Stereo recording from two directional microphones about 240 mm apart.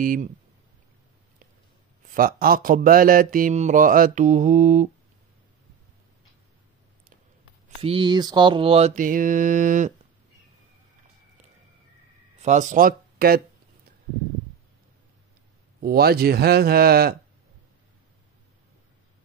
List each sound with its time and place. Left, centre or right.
0.0 s speech: right
2.0 s speech: right
7.8 s mantra: right
12.4 s speech: right
15.8 s speech: right